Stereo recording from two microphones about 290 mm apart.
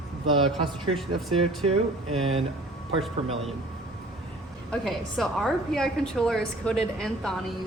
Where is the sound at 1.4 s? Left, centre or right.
Centre.